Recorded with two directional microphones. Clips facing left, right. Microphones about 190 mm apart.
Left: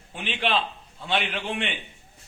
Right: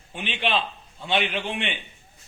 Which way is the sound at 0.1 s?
Centre (ahead or behind).